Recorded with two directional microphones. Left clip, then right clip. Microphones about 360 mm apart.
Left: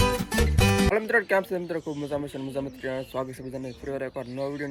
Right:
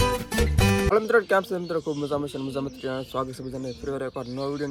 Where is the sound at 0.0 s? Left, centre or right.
Centre.